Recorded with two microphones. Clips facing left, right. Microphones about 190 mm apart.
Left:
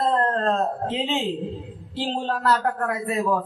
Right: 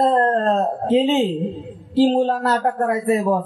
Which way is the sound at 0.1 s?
35° right (ahead or behind).